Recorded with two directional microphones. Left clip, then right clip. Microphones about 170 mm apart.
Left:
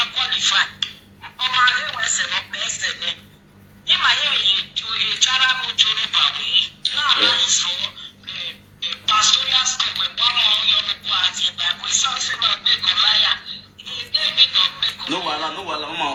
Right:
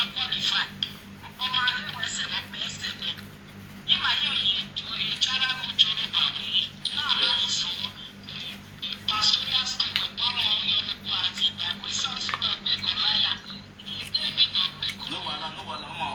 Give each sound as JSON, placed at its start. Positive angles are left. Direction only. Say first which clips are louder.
{"t": 0.0, "sound": "speech", "louder": "left 7 dB", "side_deg": 45}
{"t": 9.0, "sound": "speech", "louder": "left 8 dB", "side_deg": 45}